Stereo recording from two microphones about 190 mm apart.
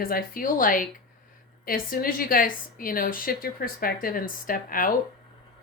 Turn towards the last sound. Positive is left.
turn(degrees=45)  # may be behind; listen again after turning